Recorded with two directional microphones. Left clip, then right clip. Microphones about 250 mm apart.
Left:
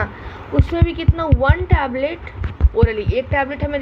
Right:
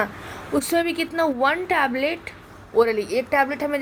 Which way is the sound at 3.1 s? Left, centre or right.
Right.